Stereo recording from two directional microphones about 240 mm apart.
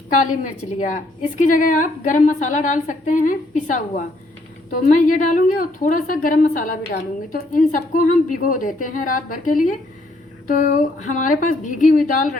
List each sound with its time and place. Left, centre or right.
1.4 s a woman's voice: left